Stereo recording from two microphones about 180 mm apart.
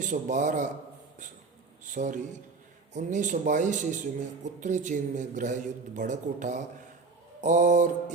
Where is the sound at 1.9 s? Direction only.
45° right (ahead or behind).